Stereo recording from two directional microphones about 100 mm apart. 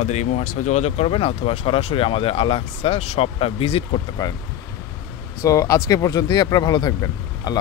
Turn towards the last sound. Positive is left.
turn(degrees=40)  # may be behind; listen again after turning